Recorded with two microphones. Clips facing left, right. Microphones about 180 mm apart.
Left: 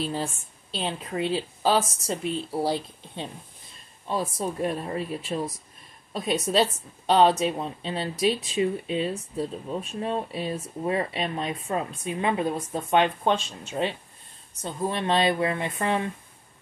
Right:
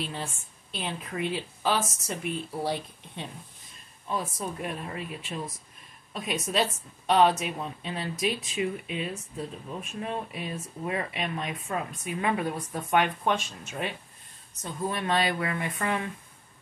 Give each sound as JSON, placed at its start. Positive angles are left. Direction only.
{"t": 0.0, "sound": "speech", "side_deg": 35}